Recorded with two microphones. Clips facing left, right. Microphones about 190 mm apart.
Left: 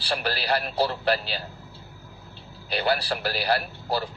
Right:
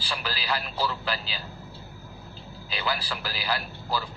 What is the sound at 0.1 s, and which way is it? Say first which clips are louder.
Speech: left 5 dB; 65° left (ahead or behind).